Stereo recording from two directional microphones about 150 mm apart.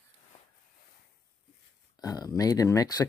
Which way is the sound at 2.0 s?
25° left (ahead or behind).